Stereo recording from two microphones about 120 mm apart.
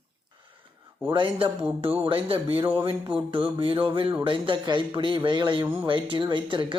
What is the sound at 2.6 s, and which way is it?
Speech, 20° right (ahead or behind).